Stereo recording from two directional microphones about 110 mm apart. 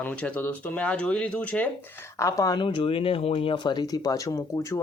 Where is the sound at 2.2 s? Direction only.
35° left (ahead or behind).